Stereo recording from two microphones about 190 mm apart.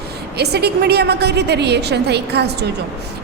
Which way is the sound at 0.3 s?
60° right (ahead or behind).